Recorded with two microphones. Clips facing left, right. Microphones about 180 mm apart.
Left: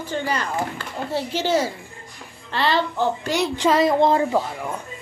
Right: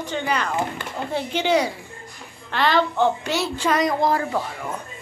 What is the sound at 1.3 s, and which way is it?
Speech, 55° right (ahead or behind).